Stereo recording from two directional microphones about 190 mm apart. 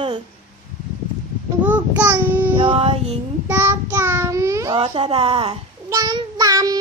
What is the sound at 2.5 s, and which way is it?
Speech, 25° right (ahead or behind).